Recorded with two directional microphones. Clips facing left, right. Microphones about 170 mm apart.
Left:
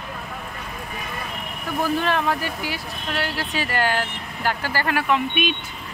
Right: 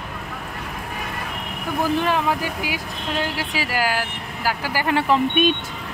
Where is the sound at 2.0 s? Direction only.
15° right (ahead or behind).